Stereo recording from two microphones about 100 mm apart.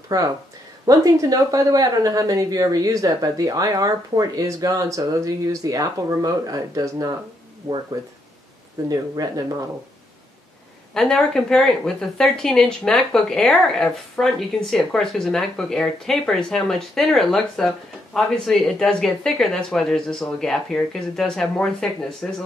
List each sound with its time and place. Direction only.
0.1 s a woman's voice: 40° right (ahead or behind)
8.8 s a woman's voice: 40° right (ahead or behind)
11.0 s speech: 5° left (ahead or behind)